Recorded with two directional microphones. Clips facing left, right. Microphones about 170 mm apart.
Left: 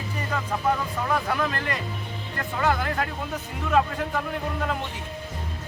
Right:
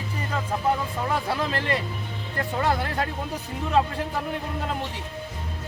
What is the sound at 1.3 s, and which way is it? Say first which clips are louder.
Speech: right 1 dB; 30° right (ahead or behind).